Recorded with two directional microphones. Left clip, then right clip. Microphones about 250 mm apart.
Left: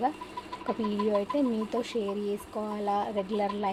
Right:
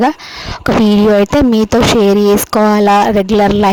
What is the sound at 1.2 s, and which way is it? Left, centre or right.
A woman's voice, right.